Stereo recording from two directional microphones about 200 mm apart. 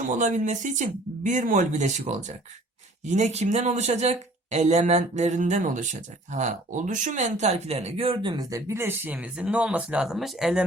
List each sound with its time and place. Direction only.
0.1 s speech: 35° right (ahead or behind); by 10.6 s centre (ahead or behind)